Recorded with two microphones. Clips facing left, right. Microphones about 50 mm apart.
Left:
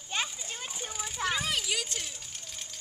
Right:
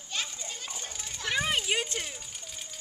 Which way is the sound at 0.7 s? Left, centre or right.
Centre.